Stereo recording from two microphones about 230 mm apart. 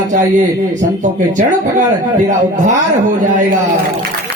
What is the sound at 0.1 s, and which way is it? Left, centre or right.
Speech, right.